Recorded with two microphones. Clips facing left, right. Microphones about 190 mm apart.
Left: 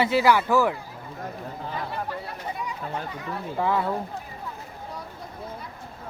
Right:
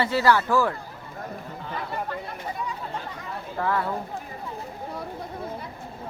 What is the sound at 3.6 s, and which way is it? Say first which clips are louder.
Speech: left 1 dB; 15° left (ahead or behind).